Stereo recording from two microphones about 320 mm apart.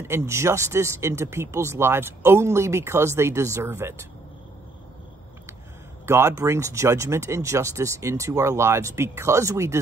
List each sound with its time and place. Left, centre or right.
0.0 s speech: centre
6.0 s speech: centre